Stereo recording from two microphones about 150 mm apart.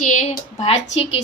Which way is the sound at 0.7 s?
40° left (ahead or behind).